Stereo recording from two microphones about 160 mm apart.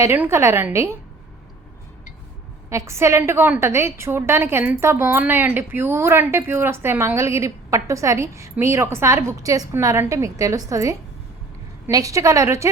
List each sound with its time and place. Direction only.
0.0 s a woman's voice: 15° right (ahead or behind)
2.6 s a woman's voice: 20° right (ahead or behind)